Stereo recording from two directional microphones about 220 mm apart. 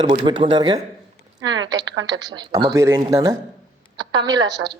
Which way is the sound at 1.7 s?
55° right (ahead or behind).